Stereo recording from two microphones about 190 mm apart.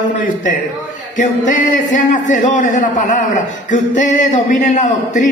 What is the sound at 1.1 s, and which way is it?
A man's voice, 40° left (ahead or behind).